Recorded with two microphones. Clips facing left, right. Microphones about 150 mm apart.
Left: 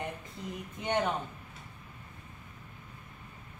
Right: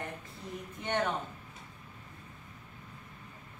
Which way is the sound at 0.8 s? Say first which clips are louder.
Left 2 dB; 15° left (ahead or behind).